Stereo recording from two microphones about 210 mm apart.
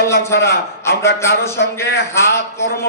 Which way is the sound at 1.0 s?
15° left (ahead or behind).